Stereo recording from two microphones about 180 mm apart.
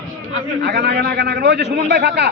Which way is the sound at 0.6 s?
65° right (ahead or behind).